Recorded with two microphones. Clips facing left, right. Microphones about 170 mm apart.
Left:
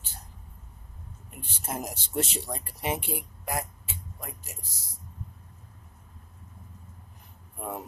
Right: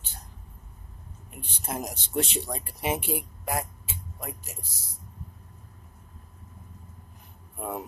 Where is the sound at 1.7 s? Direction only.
5° left (ahead or behind).